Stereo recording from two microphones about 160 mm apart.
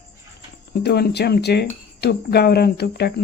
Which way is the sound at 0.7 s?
85° left.